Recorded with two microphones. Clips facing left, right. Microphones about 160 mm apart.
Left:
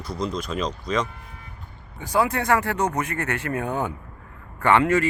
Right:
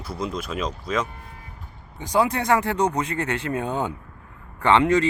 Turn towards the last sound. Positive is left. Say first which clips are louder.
# right 1 dB
turn(degrees=-20)  # may be behind; listen again after turning